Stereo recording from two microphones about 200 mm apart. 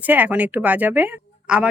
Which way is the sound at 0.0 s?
10° right (ahead or behind).